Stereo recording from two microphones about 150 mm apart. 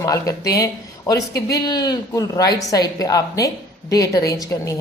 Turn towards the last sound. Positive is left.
turn(degrees=20)  # may be behind; listen again after turning